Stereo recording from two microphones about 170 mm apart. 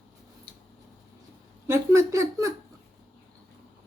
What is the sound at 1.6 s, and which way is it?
Speech, 15° right (ahead or behind).